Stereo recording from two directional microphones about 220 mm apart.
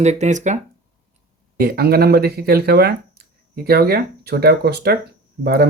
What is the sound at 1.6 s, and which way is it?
Speech, 45° right (ahead or behind).